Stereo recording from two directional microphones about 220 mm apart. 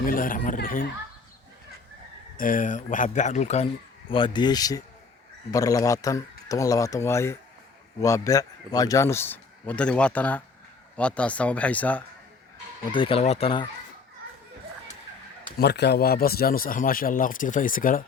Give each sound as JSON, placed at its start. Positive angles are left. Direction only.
{"t": 0.0, "sound": "speech", "side_deg": 40}
{"t": 2.4, "sound": "a man's voice", "side_deg": 35}
{"t": 12.9, "sound": "speech", "side_deg": 25}
{"t": 15.5, "sound": "speech", "side_deg": 50}